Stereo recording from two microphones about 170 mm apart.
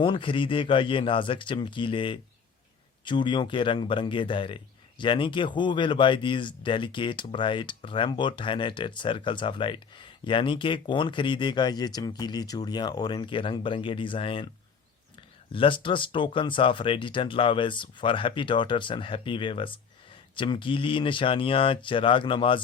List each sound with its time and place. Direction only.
0.0 s speech: 30° left (ahead or behind)
15.5 s speech: 30° left (ahead or behind)